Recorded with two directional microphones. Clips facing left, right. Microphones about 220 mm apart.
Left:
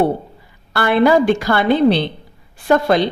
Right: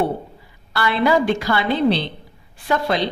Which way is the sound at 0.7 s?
50° left (ahead or behind).